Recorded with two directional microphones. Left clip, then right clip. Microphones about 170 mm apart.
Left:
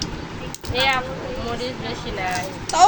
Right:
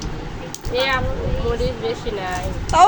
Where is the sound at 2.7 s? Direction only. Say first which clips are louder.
Right 2 dB; 15° right (ahead or behind).